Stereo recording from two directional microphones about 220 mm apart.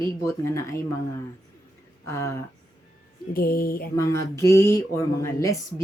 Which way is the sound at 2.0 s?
10° left (ahead or behind).